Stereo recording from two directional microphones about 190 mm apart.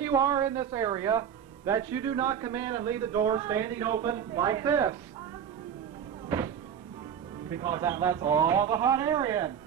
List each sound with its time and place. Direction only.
0.0 s a man's voice: 15° right (ahead or behind)
6.2 s music: 15° right (ahead or behind)
7.4 s a man's voice: 15° right (ahead or behind)